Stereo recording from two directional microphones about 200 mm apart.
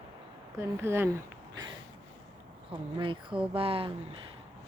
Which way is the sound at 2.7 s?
25° right (ahead or behind).